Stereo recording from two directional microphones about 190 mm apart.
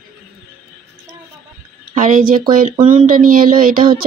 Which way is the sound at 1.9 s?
45° right (ahead or behind).